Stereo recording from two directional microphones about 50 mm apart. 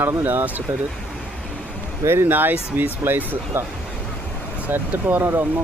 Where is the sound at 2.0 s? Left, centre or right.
Right.